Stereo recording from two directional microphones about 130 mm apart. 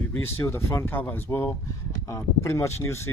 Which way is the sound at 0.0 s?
20° left (ahead or behind).